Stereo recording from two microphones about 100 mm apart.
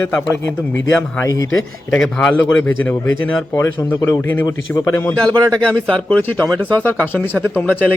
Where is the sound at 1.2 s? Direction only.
35° left (ahead or behind).